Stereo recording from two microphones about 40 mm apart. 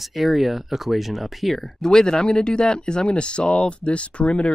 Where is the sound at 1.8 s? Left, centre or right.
Centre.